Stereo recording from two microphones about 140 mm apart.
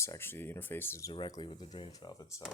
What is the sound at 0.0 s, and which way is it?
Speech, 20° left (ahead or behind).